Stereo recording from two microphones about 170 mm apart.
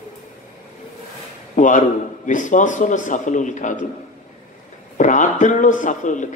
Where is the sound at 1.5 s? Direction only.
50° left (ahead or behind).